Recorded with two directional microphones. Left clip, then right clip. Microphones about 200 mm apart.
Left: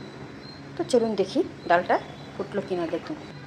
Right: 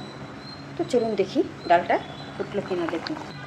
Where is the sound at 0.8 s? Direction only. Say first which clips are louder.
Even; 10° left (ahead or behind).